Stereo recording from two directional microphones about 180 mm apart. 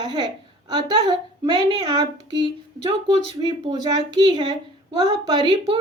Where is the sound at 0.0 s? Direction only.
25° right (ahead or behind).